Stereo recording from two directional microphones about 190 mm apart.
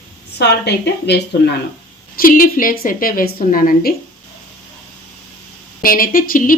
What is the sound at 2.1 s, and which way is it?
Speech, 50° left (ahead or behind).